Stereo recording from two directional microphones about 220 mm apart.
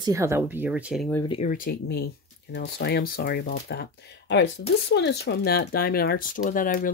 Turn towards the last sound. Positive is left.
turn(degrees=40)  # may be behind; listen again after turning